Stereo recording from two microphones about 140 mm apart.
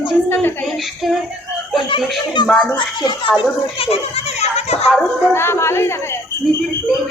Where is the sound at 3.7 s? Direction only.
40° left (ahead or behind).